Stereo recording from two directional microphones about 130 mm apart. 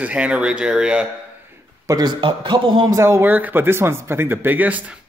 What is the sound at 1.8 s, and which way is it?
A man's voice, 30° right (ahead or behind).